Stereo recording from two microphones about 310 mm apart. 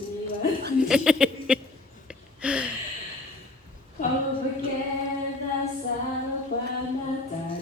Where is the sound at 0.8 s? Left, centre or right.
Centre.